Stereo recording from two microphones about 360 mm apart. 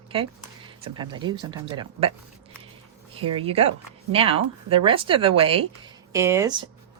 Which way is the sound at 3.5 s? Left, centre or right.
Centre.